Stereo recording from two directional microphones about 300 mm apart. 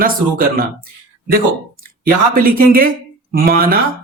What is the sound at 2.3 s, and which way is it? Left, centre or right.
Speech, right.